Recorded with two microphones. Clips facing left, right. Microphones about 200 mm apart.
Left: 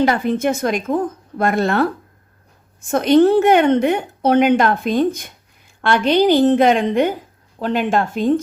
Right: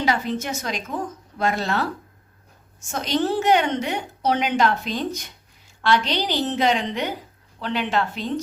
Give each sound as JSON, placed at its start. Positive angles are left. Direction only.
{"t": 0.0, "sound": "a woman's voice", "side_deg": 55}